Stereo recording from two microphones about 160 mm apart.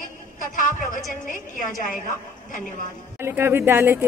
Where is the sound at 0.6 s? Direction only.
55° left (ahead or behind).